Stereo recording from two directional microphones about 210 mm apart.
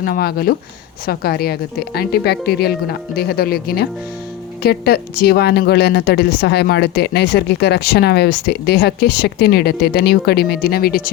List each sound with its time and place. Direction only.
0.0 s speech: 45° left (ahead or behind)